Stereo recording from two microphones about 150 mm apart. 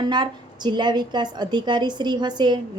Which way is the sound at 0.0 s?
30° right (ahead or behind).